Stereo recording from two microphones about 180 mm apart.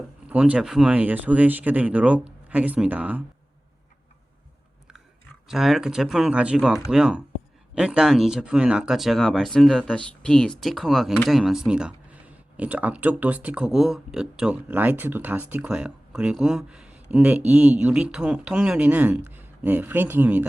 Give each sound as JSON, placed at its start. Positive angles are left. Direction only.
{"t": 0.3, "sound": "speech", "side_deg": -5}
{"t": 5.5, "sound": "speech", "side_deg": 0}